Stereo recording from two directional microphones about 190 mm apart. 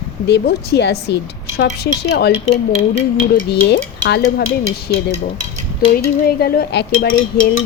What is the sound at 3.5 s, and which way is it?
Speech, 65° left (ahead or behind).